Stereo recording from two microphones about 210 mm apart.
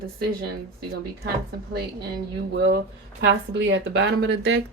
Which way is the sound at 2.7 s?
60° right (ahead or behind).